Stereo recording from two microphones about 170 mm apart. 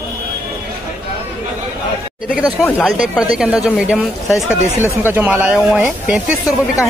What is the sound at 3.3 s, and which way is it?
Speech, 5° right (ahead or behind).